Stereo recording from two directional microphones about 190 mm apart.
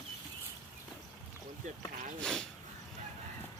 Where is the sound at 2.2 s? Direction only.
5° left (ahead or behind).